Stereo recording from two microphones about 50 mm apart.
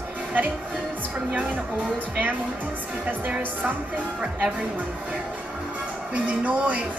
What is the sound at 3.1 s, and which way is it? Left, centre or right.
Speech, right.